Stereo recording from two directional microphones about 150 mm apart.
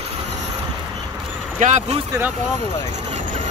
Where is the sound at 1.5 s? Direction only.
55° right (ahead or behind).